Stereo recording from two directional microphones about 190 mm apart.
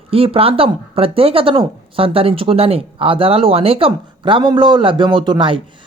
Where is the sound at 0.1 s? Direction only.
30° right (ahead or behind).